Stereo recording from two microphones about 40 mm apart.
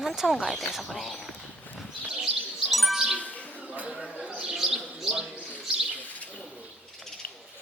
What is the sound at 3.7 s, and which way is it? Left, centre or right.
Chatter, right.